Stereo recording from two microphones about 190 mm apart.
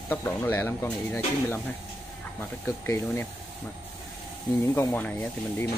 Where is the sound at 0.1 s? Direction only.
10° left (ahead or behind).